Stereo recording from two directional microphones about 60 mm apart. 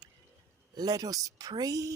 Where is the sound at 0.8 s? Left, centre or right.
Right.